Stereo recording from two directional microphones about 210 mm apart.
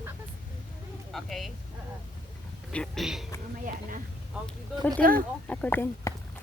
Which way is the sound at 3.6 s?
40° right (ahead or behind).